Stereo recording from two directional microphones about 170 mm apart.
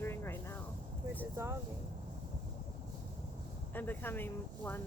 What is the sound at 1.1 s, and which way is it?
Speech, 15° right (ahead or behind).